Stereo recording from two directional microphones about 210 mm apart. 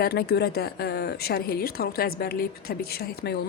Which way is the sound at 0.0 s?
50° left (ahead or behind).